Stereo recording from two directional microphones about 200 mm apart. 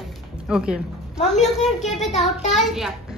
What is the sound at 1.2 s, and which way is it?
A woman's voice, 35° left (ahead or behind).